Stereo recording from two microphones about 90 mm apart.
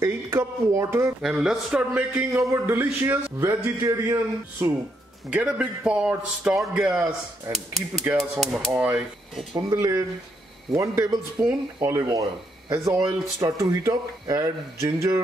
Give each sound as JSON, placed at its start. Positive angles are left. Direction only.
{"t": 0.0, "sound": "speech", "side_deg": -30}
{"t": 1.2, "sound": "a man's voice", "side_deg": -5}
{"t": 2.3, "sound": "speech", "side_deg": -30}
{"t": 2.7, "sound": "speech", "side_deg": -20}
{"t": 3.3, "sound": "speech", "side_deg": -35}
{"t": 5.3, "sound": "a man's voice", "side_deg": -15}
{"t": 8.1, "sound": "speech", "side_deg": -25}
{"t": 9.3, "sound": "speech", "side_deg": 0}
{"t": 9.6, "sound": "speech", "side_deg": -40}